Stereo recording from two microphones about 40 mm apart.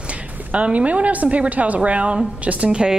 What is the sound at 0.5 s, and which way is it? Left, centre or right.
Speech, right.